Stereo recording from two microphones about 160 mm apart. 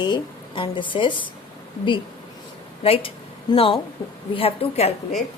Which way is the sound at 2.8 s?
35° left (ahead or behind).